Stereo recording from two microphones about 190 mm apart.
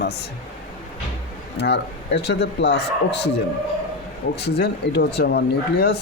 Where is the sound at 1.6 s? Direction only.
60° left (ahead or behind).